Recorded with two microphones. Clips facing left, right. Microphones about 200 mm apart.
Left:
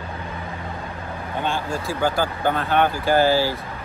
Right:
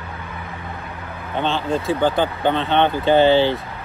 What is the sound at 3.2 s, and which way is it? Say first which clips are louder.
Speech: right 4 dB; 25° right (ahead or behind).